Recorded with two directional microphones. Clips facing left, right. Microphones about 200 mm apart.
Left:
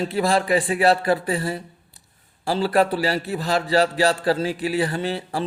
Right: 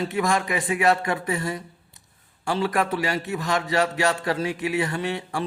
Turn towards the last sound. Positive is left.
turn(degrees=35)  # may be behind; listen again after turning